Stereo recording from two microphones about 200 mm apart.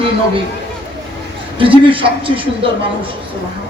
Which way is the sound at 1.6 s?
25° right (ahead or behind).